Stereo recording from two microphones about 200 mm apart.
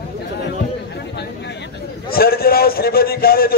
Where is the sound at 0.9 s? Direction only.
55° left (ahead or behind).